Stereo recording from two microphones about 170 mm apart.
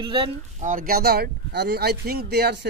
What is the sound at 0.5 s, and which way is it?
Speech, 50° right (ahead or behind).